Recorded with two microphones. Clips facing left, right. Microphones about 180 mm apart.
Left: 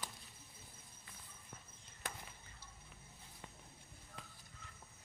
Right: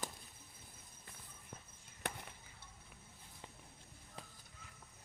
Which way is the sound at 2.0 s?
65° right (ahead or behind).